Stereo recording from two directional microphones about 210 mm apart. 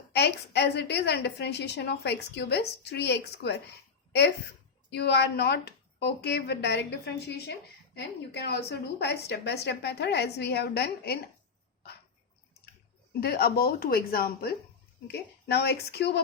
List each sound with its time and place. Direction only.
0.1 s a woman's voice: 50° left (ahead or behind)
4.9 s a woman's voice: 55° left (ahead or behind)
13.1 s a woman's voice: 50° left (ahead or behind)